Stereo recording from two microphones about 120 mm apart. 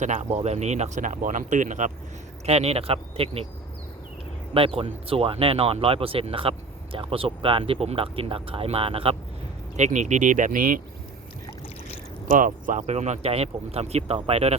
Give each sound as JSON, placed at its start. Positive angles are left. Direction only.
{"t": 0.0, "sound": "speech", "side_deg": -80}
{"t": 2.5, "sound": "speech", "side_deg": -60}
{"t": 4.5, "sound": "speech", "side_deg": -50}
{"t": 9.7, "sound": "speech", "side_deg": -80}
{"t": 12.3, "sound": "speech", "side_deg": -90}